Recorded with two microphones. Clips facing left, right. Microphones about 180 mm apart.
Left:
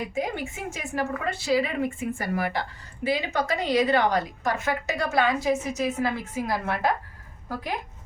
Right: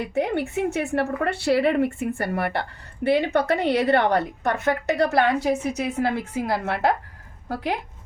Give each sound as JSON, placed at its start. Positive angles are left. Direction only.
{"t": 0.1, "sound": "a woman's voice", "side_deg": -70}